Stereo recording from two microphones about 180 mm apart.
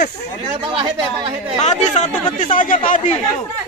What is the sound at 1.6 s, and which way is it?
Speech, 40° left (ahead or behind).